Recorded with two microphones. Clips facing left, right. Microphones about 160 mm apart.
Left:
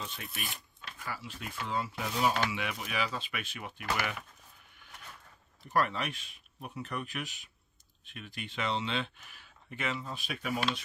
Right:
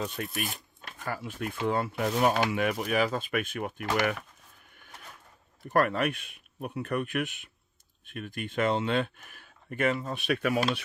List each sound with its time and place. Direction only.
0.0 s speech: 45° right (ahead or behind)
5.7 s speech: 55° right (ahead or behind); by 10.6 s 70° right (ahead or behind)